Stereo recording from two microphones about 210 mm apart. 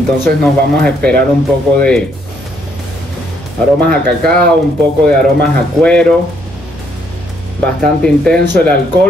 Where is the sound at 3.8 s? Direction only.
5° left (ahead or behind).